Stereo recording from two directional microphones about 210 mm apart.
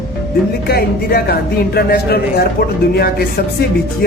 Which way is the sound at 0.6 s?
45° left (ahead or behind).